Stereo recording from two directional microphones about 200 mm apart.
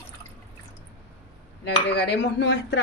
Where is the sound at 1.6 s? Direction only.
55° left (ahead or behind).